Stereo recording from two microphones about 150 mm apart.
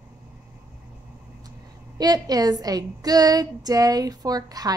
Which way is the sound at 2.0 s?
25° right (ahead or behind).